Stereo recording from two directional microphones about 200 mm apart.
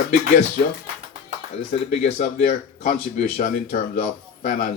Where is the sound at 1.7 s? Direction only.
40° left (ahead or behind).